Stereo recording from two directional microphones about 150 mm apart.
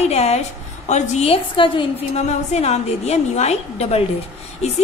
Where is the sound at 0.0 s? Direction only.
45° left (ahead or behind).